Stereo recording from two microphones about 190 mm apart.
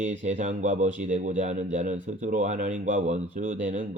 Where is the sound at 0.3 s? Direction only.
40° right (ahead or behind).